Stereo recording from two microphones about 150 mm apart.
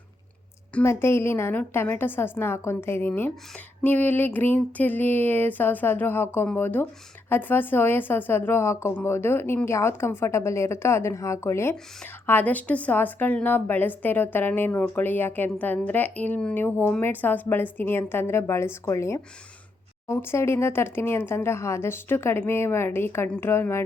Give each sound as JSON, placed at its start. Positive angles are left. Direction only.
{"t": 0.7, "sound": "a woman's voice", "side_deg": 15}